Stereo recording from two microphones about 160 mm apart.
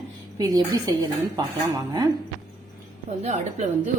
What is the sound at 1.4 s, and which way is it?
Speech, 25° right (ahead or behind).